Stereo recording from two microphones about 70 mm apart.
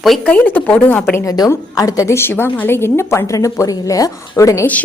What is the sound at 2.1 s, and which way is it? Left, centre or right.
A woman's voice, left.